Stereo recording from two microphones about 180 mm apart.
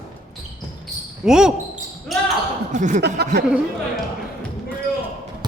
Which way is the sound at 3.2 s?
65° right (ahead or behind).